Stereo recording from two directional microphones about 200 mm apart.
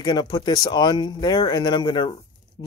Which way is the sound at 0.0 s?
20° left (ahead or behind).